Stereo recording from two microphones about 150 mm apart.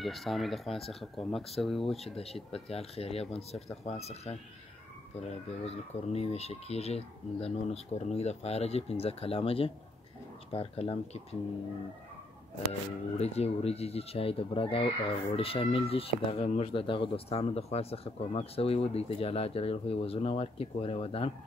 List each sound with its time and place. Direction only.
0.0 s speech: centre (ahead or behind)
2.5 s speech: 40° left (ahead or behind)
5.7 s speech: 45° left (ahead or behind)
13.2 s speech: 45° left (ahead or behind)